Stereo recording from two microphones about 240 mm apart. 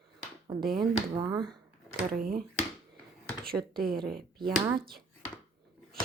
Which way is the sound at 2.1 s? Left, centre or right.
Right.